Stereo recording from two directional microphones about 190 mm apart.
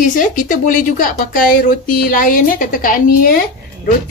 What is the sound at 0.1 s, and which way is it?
A woman's voice, 45° left (ahead or behind).